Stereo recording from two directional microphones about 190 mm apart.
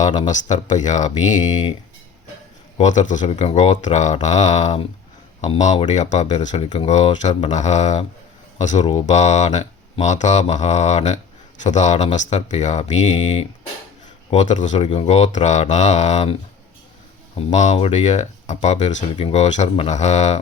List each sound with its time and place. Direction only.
0.3 s speech: 40° left (ahead or behind)
2.7 s speech: 40° left (ahead or behind)
17.3 s speech: 40° left (ahead or behind)